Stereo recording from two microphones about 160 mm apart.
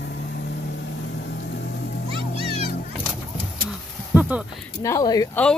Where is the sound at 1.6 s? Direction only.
90° left.